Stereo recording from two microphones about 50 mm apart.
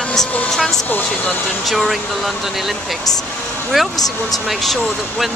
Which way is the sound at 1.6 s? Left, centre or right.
Centre.